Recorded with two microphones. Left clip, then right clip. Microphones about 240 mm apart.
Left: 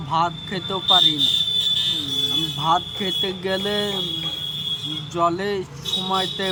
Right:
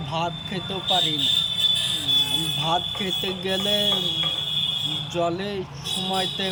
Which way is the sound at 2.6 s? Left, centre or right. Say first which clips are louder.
Left 3 dB; left.